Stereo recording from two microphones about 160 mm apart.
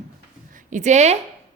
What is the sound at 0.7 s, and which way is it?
Speech, 50° right (ahead or behind).